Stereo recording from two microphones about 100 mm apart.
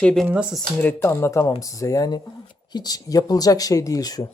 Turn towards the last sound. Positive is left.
turn(degrees=40)  # may be behind; listen again after turning